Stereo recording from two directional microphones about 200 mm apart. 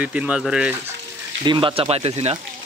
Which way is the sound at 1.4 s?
25° right (ahead or behind).